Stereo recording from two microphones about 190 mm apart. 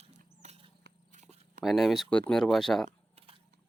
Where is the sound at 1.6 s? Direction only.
Centre (ahead or behind).